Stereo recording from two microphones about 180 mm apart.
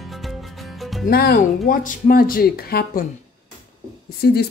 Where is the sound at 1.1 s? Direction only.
60° left (ahead or behind).